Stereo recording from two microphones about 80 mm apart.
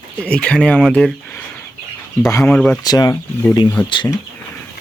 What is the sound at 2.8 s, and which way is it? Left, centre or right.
Speech, left.